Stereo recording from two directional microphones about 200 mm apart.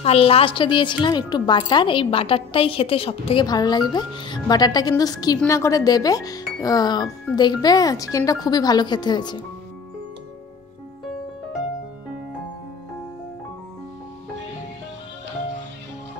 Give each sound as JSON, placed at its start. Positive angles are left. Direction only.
{"t": 0.0, "sound": "speech", "side_deg": 30}